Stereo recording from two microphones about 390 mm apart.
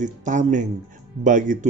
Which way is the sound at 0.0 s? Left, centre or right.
Centre.